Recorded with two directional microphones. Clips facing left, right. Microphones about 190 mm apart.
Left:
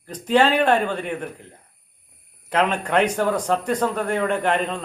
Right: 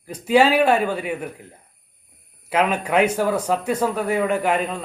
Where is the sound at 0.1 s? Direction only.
10° right (ahead or behind).